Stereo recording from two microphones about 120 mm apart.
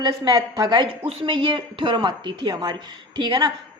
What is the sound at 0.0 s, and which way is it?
Speech, 30° right (ahead or behind).